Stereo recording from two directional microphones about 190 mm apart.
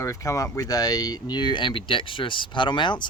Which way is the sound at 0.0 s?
15° left (ahead or behind).